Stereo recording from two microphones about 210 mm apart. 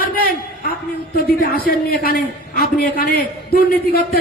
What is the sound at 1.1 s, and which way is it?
A man's voice, 45° left (ahead or behind).